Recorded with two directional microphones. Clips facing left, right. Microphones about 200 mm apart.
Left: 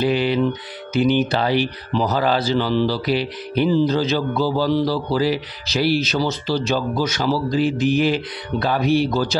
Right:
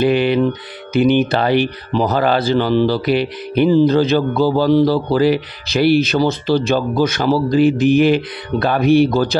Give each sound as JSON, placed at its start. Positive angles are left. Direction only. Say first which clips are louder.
{"t": 0.0, "sound": "music", "louder": "right 5 dB", "side_deg": -60}
{"t": 0.9, "sound": "speech", "louder": "right 4 dB", "side_deg": -60}